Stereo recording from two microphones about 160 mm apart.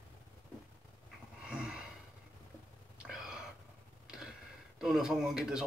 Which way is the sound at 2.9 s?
5° right (ahead or behind).